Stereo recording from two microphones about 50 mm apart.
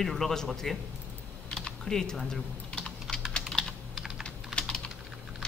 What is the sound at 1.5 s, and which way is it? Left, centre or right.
Typing, centre.